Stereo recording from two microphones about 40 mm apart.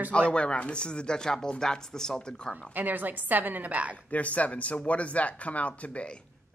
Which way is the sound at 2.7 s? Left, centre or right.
Right.